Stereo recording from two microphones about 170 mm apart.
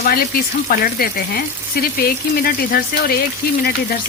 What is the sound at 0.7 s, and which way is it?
Frying, 60° left (ahead or behind).